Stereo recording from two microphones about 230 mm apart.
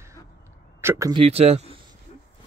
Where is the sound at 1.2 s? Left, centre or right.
Right.